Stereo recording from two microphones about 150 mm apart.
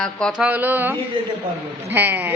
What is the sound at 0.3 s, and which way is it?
Speech, 10° right (ahead or behind).